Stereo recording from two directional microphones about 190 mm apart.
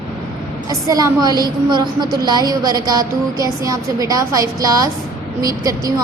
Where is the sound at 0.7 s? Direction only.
20° right (ahead or behind).